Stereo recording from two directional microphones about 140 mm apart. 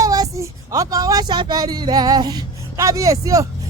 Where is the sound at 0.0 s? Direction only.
25° right (ahead or behind).